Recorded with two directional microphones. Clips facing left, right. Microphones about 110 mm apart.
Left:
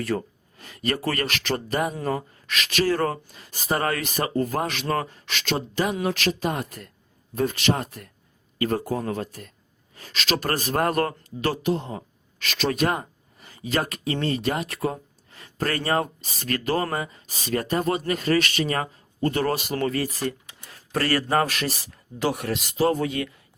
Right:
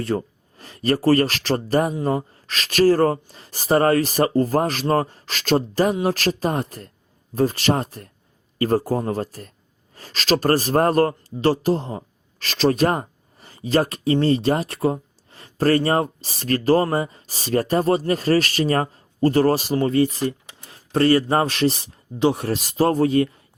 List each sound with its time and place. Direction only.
0.0 s speech: 30° right (ahead or behind)
1.9 s speech: 25° right (ahead or behind)